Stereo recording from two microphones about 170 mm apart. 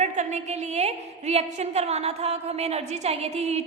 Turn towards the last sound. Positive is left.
turn(degrees=-40)  # may be behind; listen again after turning